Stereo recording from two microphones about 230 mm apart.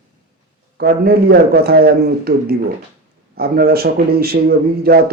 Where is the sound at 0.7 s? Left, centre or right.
Right.